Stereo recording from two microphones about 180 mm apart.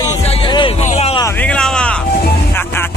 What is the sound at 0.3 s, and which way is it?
Vehicle, 30° left (ahead or behind).